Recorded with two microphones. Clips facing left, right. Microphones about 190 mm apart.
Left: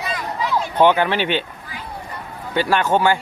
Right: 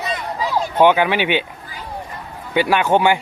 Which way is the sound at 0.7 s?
10° right (ahead or behind).